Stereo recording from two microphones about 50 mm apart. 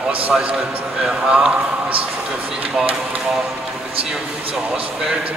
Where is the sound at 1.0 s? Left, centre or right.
Centre.